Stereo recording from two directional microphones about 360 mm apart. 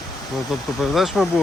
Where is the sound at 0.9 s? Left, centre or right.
Centre.